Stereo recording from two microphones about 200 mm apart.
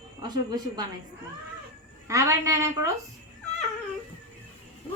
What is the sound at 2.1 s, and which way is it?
Speech, 15° right (ahead or behind).